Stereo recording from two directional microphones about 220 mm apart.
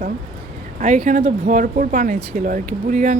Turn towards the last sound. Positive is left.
turn(degrees=-35)  # may be behind; listen again after turning